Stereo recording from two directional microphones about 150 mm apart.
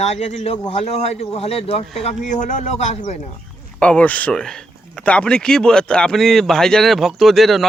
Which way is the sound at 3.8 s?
10° left (ahead or behind).